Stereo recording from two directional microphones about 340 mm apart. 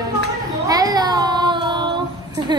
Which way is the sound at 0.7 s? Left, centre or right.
Centre.